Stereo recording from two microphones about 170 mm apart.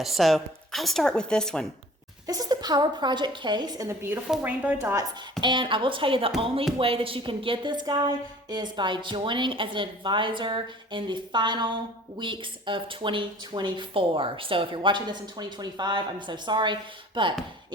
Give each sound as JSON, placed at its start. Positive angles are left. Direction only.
{"t": 0.0, "sound": "speech", "side_deg": 0}
{"t": 2.2, "sound": "a woman's voice", "side_deg": -20}
{"t": 5.4, "sound": "speech", "side_deg": -30}